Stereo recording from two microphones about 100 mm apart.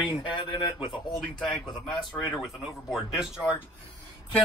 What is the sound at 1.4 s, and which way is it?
A man's voice, 5° left (ahead or behind).